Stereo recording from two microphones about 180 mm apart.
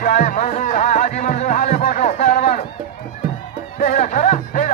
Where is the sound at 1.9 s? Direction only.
50° left (ahead or behind).